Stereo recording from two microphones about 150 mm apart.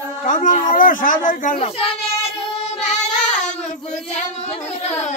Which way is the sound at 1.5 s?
40° left (ahead or behind).